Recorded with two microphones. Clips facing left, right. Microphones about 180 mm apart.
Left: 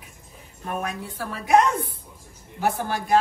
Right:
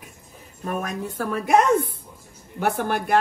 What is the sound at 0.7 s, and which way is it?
Speech, 40° right (ahead or behind).